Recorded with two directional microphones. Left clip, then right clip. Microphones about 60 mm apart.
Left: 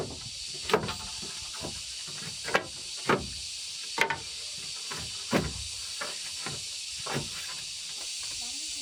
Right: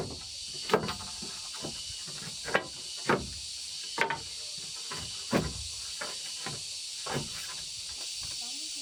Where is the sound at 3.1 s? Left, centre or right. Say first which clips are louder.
Left 2 dB; left.